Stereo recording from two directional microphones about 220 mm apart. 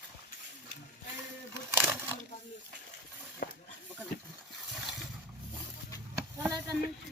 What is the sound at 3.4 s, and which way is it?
Snake, 45° left (ahead or behind).